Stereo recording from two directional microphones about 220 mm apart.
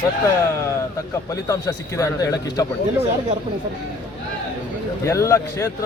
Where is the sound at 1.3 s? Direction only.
15° left (ahead or behind).